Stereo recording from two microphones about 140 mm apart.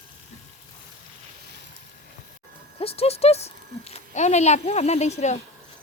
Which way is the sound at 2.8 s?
45° left (ahead or behind).